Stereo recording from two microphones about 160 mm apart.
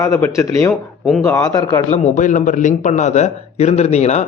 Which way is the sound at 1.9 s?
50° left (ahead or behind).